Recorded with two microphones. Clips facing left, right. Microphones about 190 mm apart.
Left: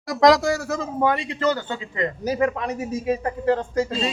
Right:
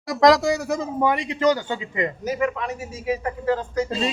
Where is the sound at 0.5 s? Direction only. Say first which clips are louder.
Right 1 dB; 15° right (ahead or behind).